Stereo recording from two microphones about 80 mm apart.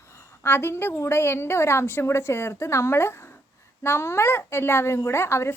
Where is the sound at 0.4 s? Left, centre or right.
Left.